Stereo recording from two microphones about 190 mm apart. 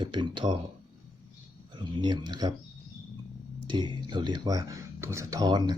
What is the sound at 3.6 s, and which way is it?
Speech, 25° right (ahead or behind).